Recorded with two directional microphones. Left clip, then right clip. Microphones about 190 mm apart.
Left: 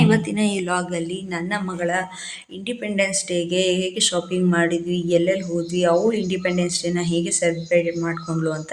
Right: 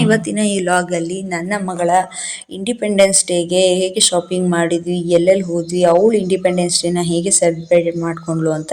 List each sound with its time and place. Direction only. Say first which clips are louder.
0.0 s speech: right 4 dB; 15° right (ahead or behind)